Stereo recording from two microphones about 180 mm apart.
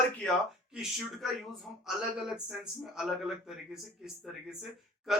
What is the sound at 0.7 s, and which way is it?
Speech, centre (ahead or behind).